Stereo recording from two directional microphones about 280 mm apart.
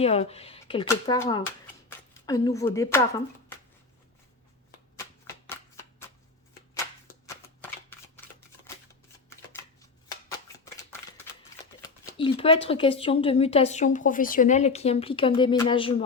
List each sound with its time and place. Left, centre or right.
0.0 s speech: left
4.9 s shuffling cards: centre
9.3 s shuffling cards: centre
11.8 s a sound: centre
12.6 s speech: centre